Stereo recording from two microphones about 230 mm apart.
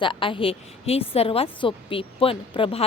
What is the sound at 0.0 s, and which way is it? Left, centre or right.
A woman's voice, left.